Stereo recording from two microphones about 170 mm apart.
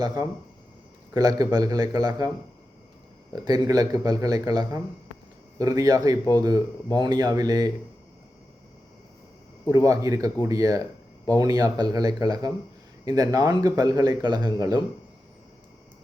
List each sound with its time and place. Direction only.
0.0 s speech: 25° right (ahead or behind)
3.3 s speech: 20° right (ahead or behind)
9.6 s speech: 20° right (ahead or behind)